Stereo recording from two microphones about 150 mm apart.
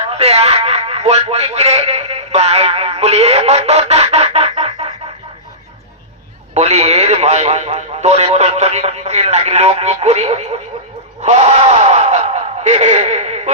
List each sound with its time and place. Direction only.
0.0 s speech: 45° right (ahead or behind)
6.5 s speech: 45° right (ahead or behind)
11.2 s a sound: 50° right (ahead or behind)